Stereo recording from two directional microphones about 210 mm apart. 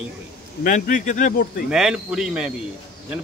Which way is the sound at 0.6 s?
40° left (ahead or behind).